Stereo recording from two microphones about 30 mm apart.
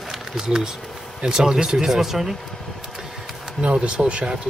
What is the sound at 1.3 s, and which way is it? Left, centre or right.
Speech, centre.